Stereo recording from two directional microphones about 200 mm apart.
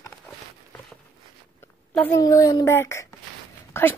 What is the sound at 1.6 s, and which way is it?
A woman's voice, 10° left (ahead or behind).